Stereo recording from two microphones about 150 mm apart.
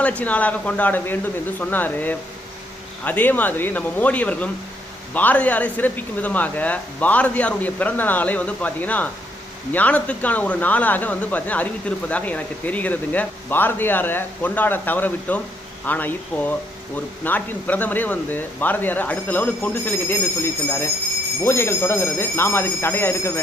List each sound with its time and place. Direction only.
0.0 s speech: 10° left (ahead or behind)